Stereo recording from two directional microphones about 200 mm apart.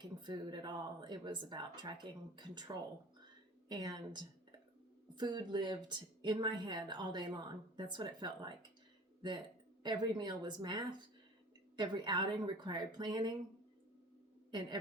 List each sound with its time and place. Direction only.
0.0 s a woman's voice: 20° right (ahead or behind)
9.8 s a woman's voice: 20° right (ahead or behind)
14.5 s a woman's voice: 20° right (ahead or behind)